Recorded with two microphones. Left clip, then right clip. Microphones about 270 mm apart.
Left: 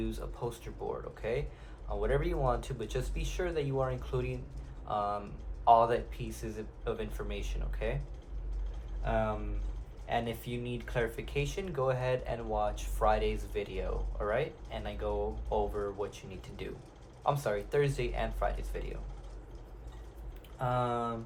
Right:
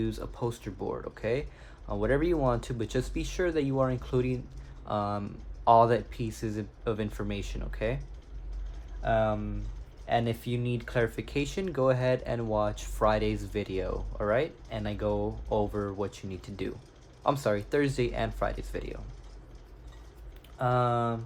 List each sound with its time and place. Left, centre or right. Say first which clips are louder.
0.0 s speech: right 5 dB; right
9.0 s speech: right 6 dB; right
20.6 s speech: right 5 dB; right